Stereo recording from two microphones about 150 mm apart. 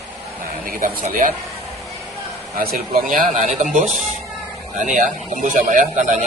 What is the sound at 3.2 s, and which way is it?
A man's voice, 50° right (ahead or behind).